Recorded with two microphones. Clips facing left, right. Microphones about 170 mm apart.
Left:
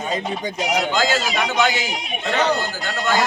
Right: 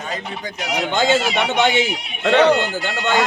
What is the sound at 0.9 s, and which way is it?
Speech, 25° right (ahead or behind).